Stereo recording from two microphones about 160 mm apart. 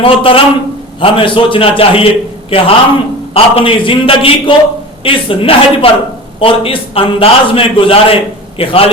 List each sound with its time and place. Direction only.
0.0 s a man's voice: 35° left (ahead or behind)